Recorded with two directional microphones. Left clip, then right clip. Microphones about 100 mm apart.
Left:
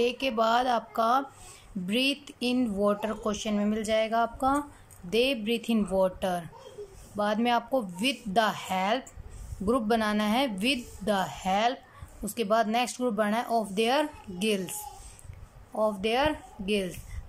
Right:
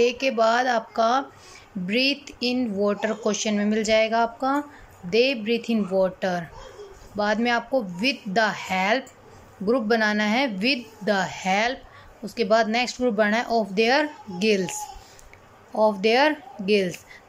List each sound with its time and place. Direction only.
0.0 s a woman's voice: 30° left (ahead or behind)